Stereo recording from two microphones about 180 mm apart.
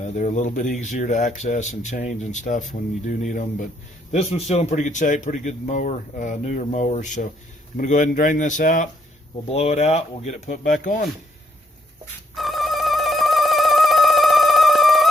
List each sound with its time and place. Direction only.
0.0 s speech: 40° left (ahead or behind)
4.1 s speech: 35° left (ahead or behind)
12.3 s music: centre (ahead or behind)